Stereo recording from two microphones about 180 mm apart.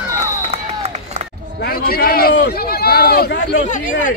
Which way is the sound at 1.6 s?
55° left (ahead or behind).